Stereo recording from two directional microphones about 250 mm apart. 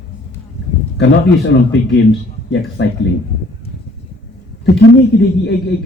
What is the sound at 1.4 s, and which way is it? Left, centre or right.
A man's voice, left.